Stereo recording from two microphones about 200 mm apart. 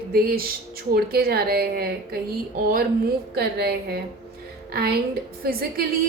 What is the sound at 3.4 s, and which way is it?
A woman's voice, 55° right (ahead or behind).